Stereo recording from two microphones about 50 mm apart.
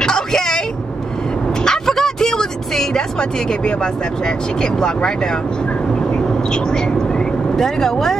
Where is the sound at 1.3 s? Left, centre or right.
Centre.